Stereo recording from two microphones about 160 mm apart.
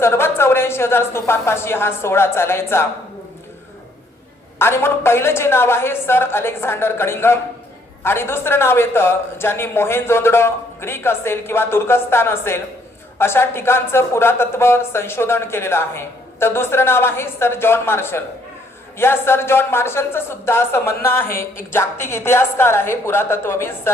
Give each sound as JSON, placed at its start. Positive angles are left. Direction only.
{"t": 0.0, "sound": "a woman's voice", "side_deg": 15}
{"t": 4.5, "sound": "a woman's voice", "side_deg": 15}
{"t": 21.2, "sound": "speech", "side_deg": 60}
{"t": 21.7, "sound": "a woman's voice", "side_deg": 15}